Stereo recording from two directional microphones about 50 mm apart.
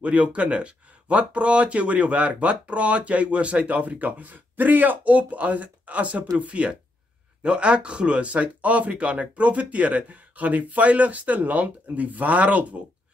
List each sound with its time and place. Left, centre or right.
0.0 s speech: right